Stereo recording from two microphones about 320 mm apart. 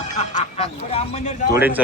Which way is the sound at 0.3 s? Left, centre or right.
Centre.